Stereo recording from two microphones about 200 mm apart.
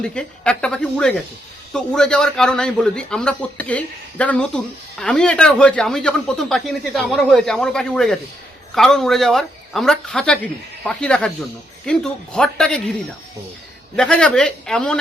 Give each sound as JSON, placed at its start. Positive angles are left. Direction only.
{"t": 0.0, "sound": "a man's voice", "side_deg": 5}
{"t": 13.9, "sound": "a man's voice", "side_deg": 5}